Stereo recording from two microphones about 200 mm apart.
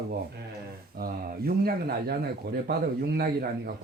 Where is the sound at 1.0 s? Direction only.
50° right (ahead or behind).